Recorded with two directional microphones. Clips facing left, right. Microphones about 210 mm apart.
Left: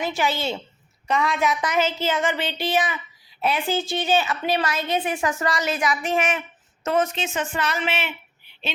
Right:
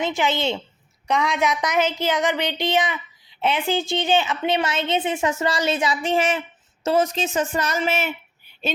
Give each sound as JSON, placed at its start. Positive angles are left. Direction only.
{"t": 0.0, "sound": "a woman's voice", "side_deg": -20}